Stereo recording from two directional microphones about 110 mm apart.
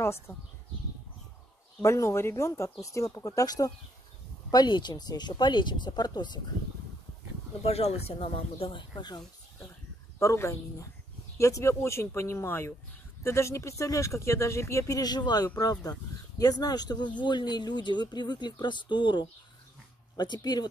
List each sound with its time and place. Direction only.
0.0 s speech: 25° left (ahead or behind)
1.8 s speech: 25° left (ahead or behind); by 6.4 s 40° left (ahead or behind)
7.6 s speech: 70° left (ahead or behind); by 9.2 s 45° left (ahead or behind)
10.1 s speech: 25° left (ahead or behind)